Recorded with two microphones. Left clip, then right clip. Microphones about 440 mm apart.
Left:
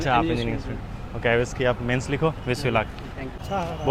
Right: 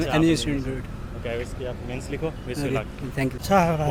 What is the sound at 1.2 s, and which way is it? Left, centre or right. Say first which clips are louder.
Speech: left 9 dB; left.